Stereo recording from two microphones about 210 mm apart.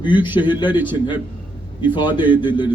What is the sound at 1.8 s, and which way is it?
Speech, 20° left (ahead or behind).